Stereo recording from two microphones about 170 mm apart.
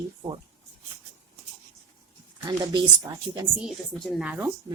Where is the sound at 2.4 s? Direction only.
25° right (ahead or behind).